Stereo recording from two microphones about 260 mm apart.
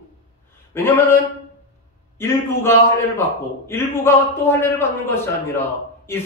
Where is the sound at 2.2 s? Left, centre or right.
Centre.